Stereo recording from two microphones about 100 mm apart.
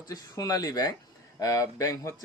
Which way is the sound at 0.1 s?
40° left (ahead or behind).